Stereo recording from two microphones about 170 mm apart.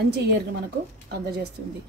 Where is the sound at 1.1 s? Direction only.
80° right.